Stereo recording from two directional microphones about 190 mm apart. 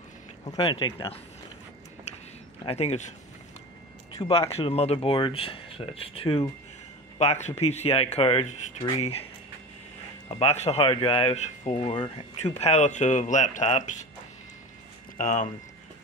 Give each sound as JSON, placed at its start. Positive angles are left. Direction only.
{"t": 0.5, "sound": "speech", "side_deg": 25}
{"t": 2.6, "sound": "speech", "side_deg": 30}
{"t": 4.5, "sound": "speech", "side_deg": 30}
{"t": 10.2, "sound": "speech", "side_deg": 35}
{"t": 15.1, "sound": "speech", "side_deg": 45}